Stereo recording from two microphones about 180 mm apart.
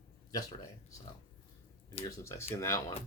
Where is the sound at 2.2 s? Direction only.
15° left (ahead or behind).